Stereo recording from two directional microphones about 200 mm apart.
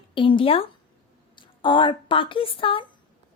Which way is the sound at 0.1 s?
25° left (ahead or behind).